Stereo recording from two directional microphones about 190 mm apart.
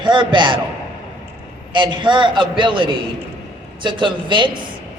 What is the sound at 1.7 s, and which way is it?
A man's voice, 25° right (ahead or behind).